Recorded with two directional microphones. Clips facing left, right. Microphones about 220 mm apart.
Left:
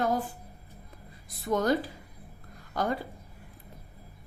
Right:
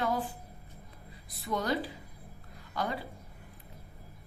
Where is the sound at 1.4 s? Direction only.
45° left (ahead or behind).